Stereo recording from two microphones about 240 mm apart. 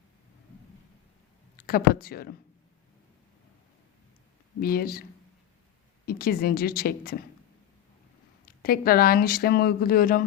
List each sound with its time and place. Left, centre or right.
1.5 s speech: left
4.6 s speech: left
6.1 s speech: left
8.4 s speech: left